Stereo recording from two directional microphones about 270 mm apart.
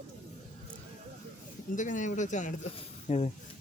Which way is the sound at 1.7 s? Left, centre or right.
Left.